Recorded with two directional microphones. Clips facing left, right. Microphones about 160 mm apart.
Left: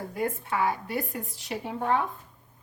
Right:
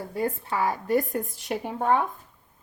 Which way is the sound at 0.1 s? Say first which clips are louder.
Right 2 dB; 30° right (ahead or behind).